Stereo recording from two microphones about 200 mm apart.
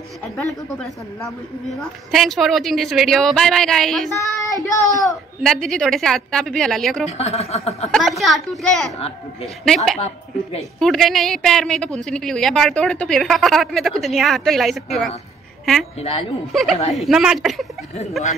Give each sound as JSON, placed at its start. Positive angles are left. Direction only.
{"t": 1.8, "sound": "a woman's voice", "side_deg": 0}
{"t": 4.1, "sound": "child singing", "side_deg": 15}
{"t": 4.9, "sound": "a woman's voice", "side_deg": 0}
{"t": 7.1, "sound": "speech", "side_deg": 30}
{"t": 8.2, "sound": "a woman's voice", "side_deg": 0}
{"t": 9.9, "sound": "a woman's voice", "side_deg": 35}
{"t": 10.8, "sound": "a woman's voice", "side_deg": 0}
{"t": 16.0, "sound": "speech", "side_deg": 30}
{"t": 16.5, "sound": "a woman's voice", "side_deg": 0}